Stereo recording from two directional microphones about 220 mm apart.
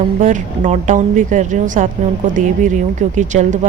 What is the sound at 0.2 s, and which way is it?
A woman's voice, 35° right (ahead or behind).